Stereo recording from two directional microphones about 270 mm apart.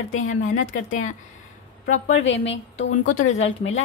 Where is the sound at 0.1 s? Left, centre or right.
Left.